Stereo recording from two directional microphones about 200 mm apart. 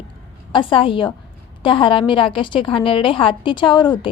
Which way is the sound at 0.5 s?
25° left (ahead or behind).